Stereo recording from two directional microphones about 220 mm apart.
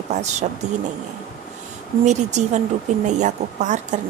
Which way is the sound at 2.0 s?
30° right (ahead or behind).